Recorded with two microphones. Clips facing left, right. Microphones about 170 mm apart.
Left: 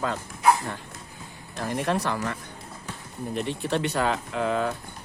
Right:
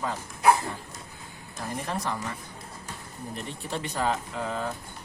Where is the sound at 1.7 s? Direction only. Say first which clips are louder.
Left 5 dB; 75° left (ahead or behind).